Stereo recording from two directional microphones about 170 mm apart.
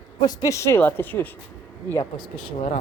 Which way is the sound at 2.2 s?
30° left (ahead or behind).